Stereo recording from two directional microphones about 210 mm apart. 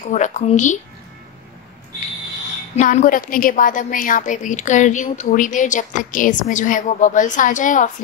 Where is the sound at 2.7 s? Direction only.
35° left (ahead or behind).